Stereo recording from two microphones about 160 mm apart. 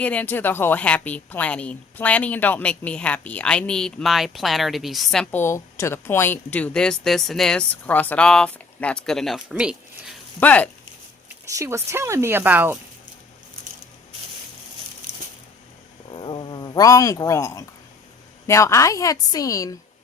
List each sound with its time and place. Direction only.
0.0 s a woman's voice: 10° left (ahead or behind)
10.4 s a woman's voice: 10° left (ahead or behind)
11.4 s speech: 20° right (ahead or behind)
16.1 s a sound: 30° left (ahead or behind)
18.4 s a woman's voice: 20° left (ahead or behind)